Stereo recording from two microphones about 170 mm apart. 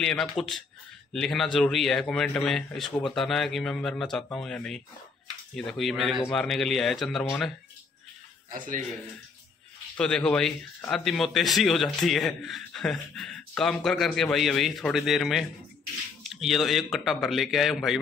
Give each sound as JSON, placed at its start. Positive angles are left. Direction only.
{"t": 0.0, "sound": "speech", "side_deg": 5}
{"t": 8.5, "sound": "speech", "side_deg": -50}
{"t": 9.9, "sound": "speech", "side_deg": 5}